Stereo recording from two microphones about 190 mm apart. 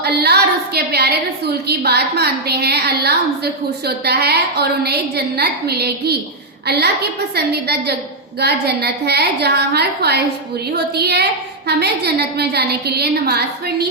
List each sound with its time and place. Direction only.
0.0 s a woman's voice: 60° right (ahead or behind)